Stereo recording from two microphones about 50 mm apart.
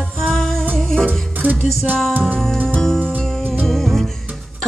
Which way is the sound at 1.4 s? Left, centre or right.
Right.